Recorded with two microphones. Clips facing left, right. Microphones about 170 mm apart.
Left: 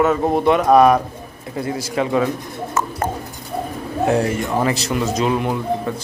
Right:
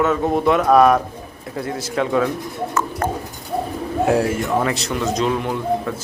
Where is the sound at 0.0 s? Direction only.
Centre (ahead or behind).